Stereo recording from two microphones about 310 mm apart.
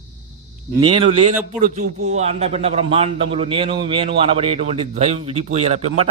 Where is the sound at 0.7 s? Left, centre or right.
Centre.